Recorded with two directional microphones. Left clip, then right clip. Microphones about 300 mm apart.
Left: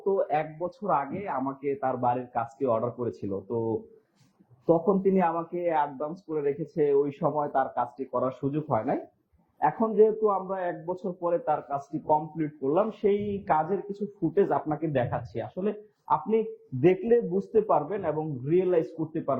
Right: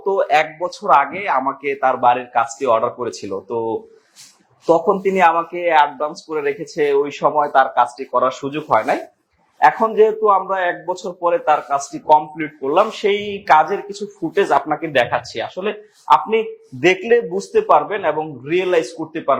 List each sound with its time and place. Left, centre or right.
0.2 s a man's voice: centre
3.3 s speech: right
5.0 s a man's voice: centre